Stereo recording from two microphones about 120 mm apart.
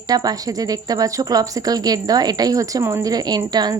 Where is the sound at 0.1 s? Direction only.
30° right (ahead or behind).